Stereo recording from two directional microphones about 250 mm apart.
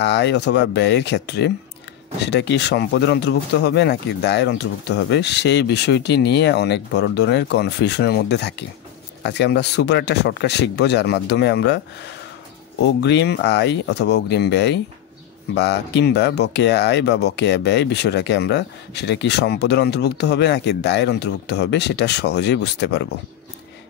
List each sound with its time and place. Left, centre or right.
0.0 s speech: left
13.0 s speech: left